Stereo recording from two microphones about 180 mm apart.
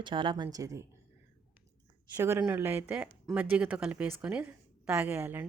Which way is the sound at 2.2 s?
15° right (ahead or behind).